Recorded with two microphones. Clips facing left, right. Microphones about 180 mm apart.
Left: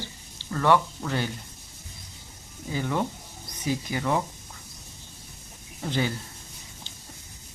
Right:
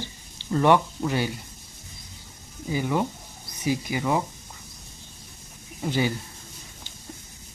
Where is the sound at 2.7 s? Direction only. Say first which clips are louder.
Right 3 dB; 10° right (ahead or behind).